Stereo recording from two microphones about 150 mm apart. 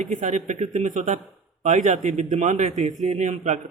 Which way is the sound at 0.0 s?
55° right (ahead or behind).